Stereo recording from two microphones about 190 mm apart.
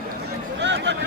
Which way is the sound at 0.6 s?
65° right (ahead or behind).